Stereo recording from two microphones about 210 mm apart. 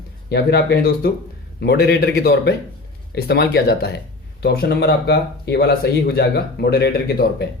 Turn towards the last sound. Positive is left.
turn(degrees=50)  # may be behind; listen again after turning